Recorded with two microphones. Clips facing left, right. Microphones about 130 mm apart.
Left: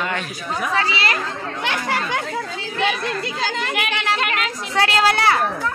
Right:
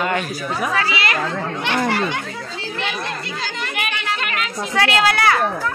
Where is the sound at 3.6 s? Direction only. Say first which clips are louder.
Left 2 dB; 90° left.